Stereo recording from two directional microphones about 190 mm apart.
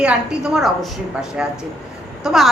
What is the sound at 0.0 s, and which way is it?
A woman's voice, 5° right (ahead or behind).